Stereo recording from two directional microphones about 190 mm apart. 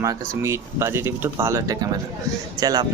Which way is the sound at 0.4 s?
15° right (ahead or behind).